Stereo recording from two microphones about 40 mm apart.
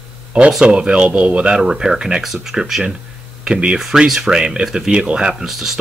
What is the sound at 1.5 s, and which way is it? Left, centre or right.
Speech, centre.